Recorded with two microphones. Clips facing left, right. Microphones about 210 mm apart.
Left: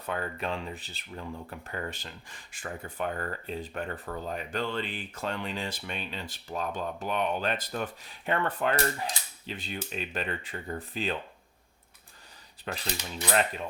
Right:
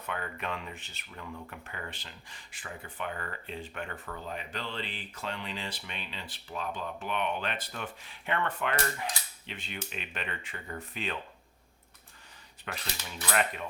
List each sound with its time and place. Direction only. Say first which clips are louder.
0.0 s speech: left 4 dB; 35° left (ahead or behind)
12.7 s speech: left 5 dB; 35° left (ahead or behind)